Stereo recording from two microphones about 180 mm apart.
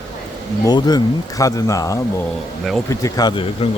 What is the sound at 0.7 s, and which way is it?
Speech, 20° left (ahead or behind).